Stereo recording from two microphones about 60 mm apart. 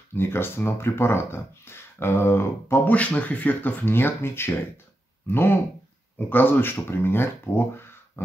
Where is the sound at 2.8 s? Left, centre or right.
Left.